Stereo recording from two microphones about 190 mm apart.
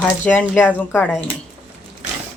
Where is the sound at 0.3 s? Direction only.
10° left (ahead or behind).